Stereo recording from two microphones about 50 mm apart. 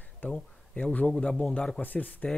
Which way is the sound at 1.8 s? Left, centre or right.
Left.